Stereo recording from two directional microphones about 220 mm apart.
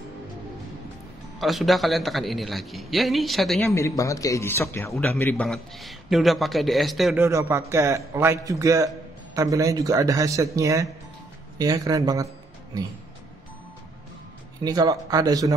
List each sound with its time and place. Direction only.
1.4 s a man's voice: centre (ahead or behind)
3.7 s a man's voice: 15° left (ahead or behind)
7.2 s a man's voice: 10° right (ahead or behind)
14.6 s a man's voice: 15° right (ahead or behind)